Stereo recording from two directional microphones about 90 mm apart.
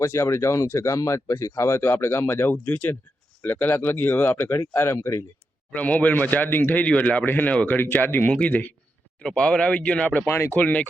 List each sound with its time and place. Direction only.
0.0 s speech: 30° left (ahead or behind)
5.7 s speech: 15° left (ahead or behind)
10.2 s speech: 30° left (ahead or behind)
10.6 s speech: 15° left (ahead or behind)